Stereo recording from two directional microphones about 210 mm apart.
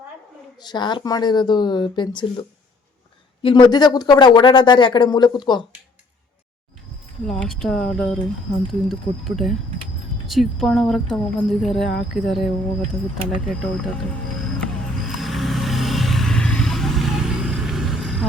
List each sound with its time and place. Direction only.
0.6 s speech: 20° left (ahead or behind)
3.4 s speech: 20° left (ahead or behind)
7.3 s speech: centre (ahead or behind)
15.1 s vehicle: centre (ahead or behind)